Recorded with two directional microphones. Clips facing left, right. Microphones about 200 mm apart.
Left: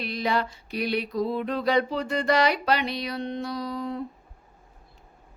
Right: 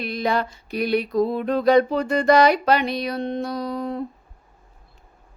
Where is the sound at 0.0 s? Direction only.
50° right (ahead or behind).